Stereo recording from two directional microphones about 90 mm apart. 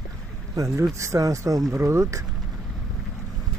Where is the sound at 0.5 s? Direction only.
35° right (ahead or behind).